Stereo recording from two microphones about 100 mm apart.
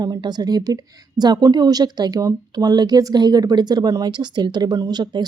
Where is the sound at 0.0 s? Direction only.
45° right (ahead or behind).